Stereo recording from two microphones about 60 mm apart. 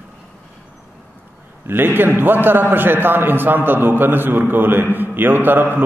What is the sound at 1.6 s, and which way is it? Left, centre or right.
A man's voice, right.